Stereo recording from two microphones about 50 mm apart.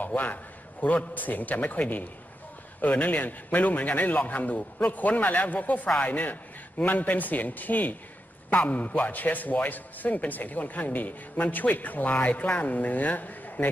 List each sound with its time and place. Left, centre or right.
0.0 s a man's voice: left